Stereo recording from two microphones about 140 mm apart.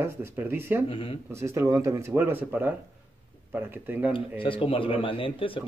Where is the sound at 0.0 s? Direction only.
15° right (ahead or behind).